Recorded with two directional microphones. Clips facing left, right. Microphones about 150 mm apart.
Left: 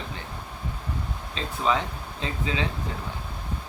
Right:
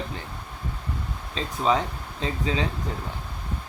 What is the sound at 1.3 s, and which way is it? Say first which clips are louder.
Speech: right 2 dB; 35° right (ahead or behind).